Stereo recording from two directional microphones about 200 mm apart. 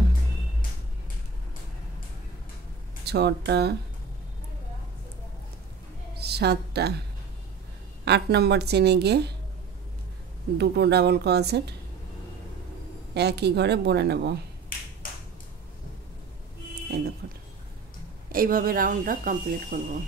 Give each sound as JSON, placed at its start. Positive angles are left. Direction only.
{"t": 3.1, "sound": "a woman's voice", "side_deg": -55}
{"t": 6.2, "sound": "a woman's voice", "side_deg": -55}
{"t": 8.0, "sound": "a woman's voice", "side_deg": -55}
{"t": 10.6, "sound": "a woman's voice", "side_deg": -55}
{"t": 13.1, "sound": "a woman's voice", "side_deg": -55}
{"t": 17.2, "sound": "speech", "side_deg": -55}